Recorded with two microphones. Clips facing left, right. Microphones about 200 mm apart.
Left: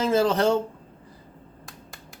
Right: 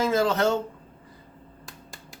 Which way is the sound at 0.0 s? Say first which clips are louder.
Left 2 dB; 30° left (ahead or behind).